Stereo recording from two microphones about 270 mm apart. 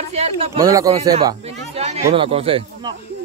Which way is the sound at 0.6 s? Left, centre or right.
Centre.